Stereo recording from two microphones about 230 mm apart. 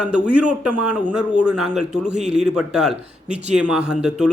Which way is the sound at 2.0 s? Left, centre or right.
Right.